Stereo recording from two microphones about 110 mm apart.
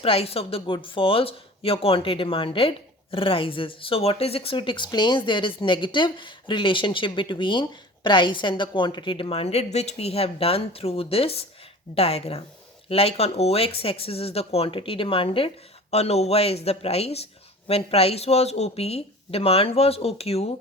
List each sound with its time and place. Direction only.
0.0 s speech: 60° left (ahead or behind)